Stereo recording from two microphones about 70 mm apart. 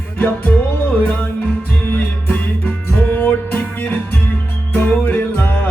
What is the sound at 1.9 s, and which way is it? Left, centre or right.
Music, left.